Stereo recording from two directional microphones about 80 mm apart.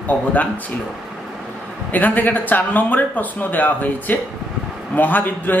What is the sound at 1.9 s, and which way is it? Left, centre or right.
Speech, left.